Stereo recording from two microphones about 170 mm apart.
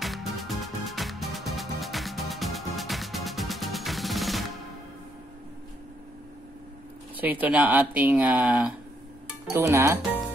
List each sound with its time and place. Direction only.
0.0 s music: centre (ahead or behind)
7.2 s speech: 10° right (ahead or behind)